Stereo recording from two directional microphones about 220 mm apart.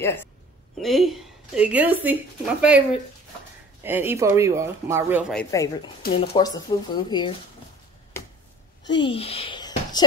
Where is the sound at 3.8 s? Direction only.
10° right (ahead or behind).